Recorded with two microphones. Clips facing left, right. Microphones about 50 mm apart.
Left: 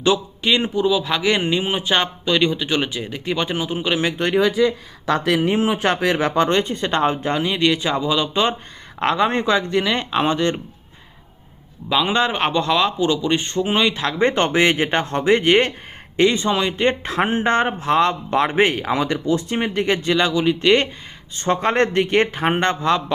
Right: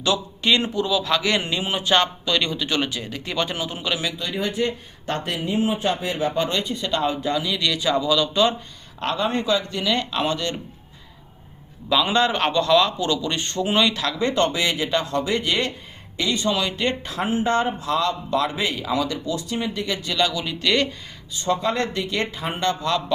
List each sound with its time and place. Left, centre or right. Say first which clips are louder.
0.7 s a man's voice: left 3 dB; centre
3.8 s a man's voice: left 6 dB; left
5.2 s speech: left 4 dB; left
9.0 s a man's voice: left 5 dB; left
11.9 s a man's voice: left 1 dB; centre
17.0 s a man's voice: left 4 dB; left
21.3 s speech: left 4 dB; left
22.8 s a man's voice: left 4 dB; left